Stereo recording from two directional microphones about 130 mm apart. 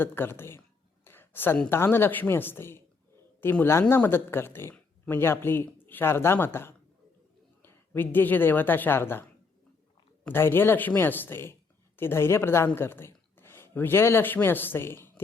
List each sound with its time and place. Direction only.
0.0 s speech: 15° left (ahead or behind)
1.0 s a sound: 15° left (ahead or behind)
1.7 s a woman's voice: 15° left (ahead or behind)